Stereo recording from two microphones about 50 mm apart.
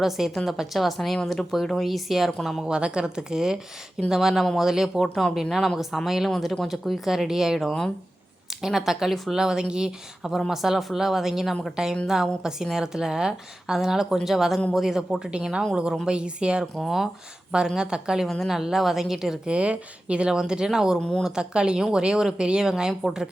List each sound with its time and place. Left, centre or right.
0.0 s speech: centre
2.6 s speech: centre
10.3 s a woman's voice: centre
16.7 s speech: centre
17.7 s speech: centre
19.5 s speech: right; by 23.3 s centre